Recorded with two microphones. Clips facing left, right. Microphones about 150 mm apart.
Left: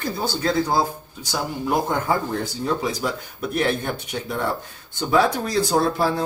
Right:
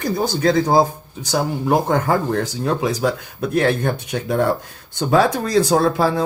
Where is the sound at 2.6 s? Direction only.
90° right.